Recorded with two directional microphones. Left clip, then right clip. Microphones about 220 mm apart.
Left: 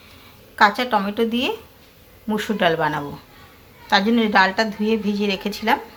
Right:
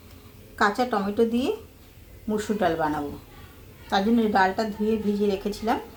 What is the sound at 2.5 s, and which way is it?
A woman's voice, 10° left (ahead or behind).